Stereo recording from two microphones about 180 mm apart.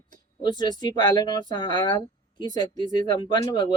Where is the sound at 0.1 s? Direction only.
25° left (ahead or behind).